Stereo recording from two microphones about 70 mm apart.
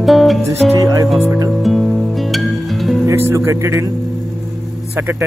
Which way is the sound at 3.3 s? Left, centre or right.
Right.